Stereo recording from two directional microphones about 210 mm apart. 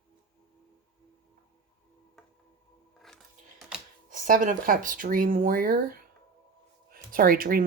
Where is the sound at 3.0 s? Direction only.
Centre (ahead or behind).